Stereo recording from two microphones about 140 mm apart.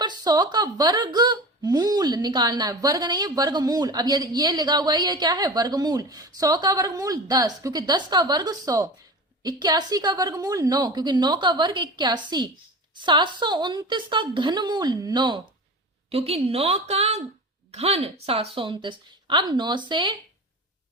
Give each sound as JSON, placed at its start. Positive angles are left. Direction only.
{"t": 0.0, "sound": "a woman's voice", "side_deg": -30}
{"t": 16.0, "sound": "a woman's voice", "side_deg": -45}